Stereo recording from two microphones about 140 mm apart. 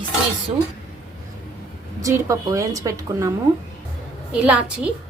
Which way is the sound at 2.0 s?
20° right (ahead or behind).